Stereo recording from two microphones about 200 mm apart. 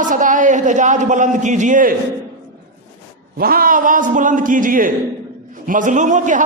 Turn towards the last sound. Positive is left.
turn(degrees=-40)  # may be behind; listen again after turning